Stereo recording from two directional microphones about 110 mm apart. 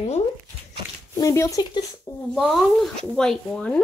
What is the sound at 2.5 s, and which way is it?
Speech, centre (ahead or behind).